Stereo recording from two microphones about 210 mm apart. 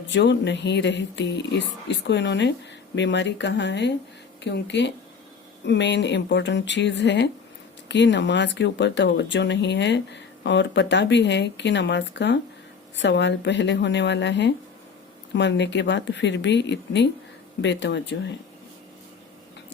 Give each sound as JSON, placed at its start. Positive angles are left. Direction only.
{"t": 0.1, "sound": "speech", "side_deg": 55}